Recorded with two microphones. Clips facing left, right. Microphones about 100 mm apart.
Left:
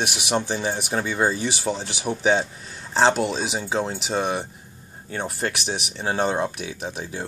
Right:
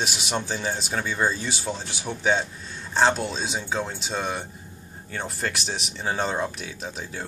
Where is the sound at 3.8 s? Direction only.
20° left (ahead or behind).